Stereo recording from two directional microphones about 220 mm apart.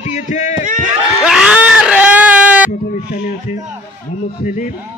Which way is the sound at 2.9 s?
45° left (ahead or behind).